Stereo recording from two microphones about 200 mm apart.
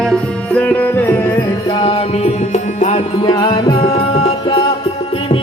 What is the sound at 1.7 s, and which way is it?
Music, 30° left (ahead or behind).